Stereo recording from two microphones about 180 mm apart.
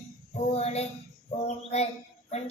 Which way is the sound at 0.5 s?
35° left (ahead or behind).